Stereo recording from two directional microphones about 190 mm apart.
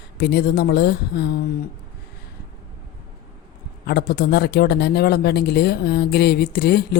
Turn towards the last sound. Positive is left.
turn(degrees=55)  # may be behind; listen again after turning